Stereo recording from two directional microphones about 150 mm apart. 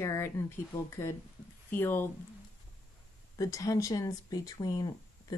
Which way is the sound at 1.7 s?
15° left (ahead or behind).